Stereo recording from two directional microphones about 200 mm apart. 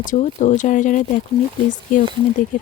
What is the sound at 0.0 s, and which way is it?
A woman's voice, 40° left (ahead or behind).